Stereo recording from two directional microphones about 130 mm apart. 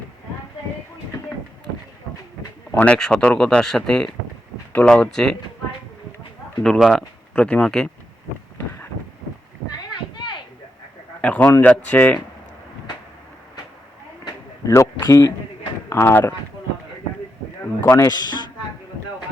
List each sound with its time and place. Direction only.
2.7 s speech: 10° left (ahead or behind)
6.6 s speech: centre (ahead or behind)
11.2 s speech: 10° left (ahead or behind)
14.7 s speech: 25° left (ahead or behind)
17.6 s speech: 20° left (ahead or behind)